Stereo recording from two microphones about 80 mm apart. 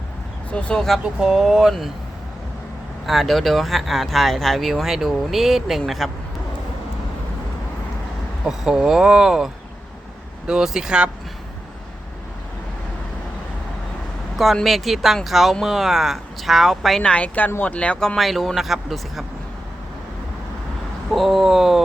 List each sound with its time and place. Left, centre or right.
0.5 s speech: centre
1.2 s speech: centre
3.1 s speech: centre
8.4 s speech: centre
14.3 s speech: centre
17.1 s speech: centre
18.2 s speech: centre
21.1 s speech: centre